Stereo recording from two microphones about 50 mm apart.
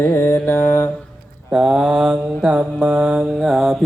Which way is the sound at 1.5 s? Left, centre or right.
Centre.